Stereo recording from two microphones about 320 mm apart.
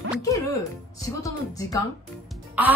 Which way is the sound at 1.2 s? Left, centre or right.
Centre.